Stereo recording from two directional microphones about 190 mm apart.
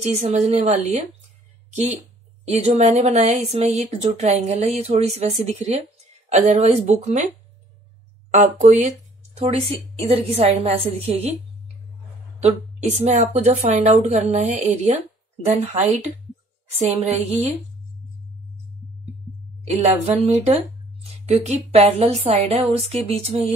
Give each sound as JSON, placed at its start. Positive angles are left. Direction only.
{"t": 0.0, "sound": "speech", "side_deg": -35}
{"t": 2.4, "sound": "speech", "side_deg": -35}
{"t": 8.3, "sound": "speech", "side_deg": -40}
{"t": 12.4, "sound": "speech", "side_deg": -35}
{"t": 16.9, "sound": "speech", "side_deg": -35}
{"t": 19.8, "sound": "speech", "side_deg": -35}